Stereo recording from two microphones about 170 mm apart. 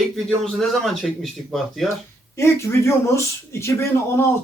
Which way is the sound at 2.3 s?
15° left (ahead or behind).